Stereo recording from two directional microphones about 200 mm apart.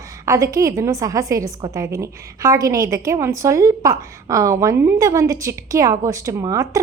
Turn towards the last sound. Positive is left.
turn(degrees=-15)  # may be behind; listen again after turning